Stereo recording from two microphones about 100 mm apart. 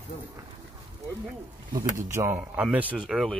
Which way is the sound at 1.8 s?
30° right (ahead or behind).